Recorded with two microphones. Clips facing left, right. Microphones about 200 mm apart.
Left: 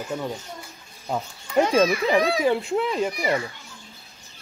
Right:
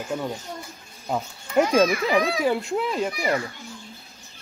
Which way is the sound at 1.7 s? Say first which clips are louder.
Even; centre (ahead or behind).